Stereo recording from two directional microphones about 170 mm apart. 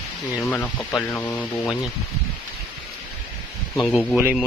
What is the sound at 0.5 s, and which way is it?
Speech, 5° left (ahead or behind).